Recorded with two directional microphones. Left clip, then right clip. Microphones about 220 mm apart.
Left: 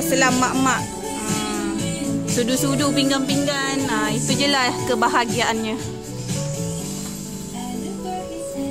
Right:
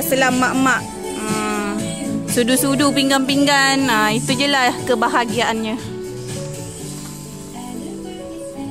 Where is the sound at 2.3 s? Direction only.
20° right (ahead or behind).